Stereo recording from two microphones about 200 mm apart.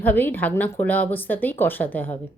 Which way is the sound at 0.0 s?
10° left (ahead or behind).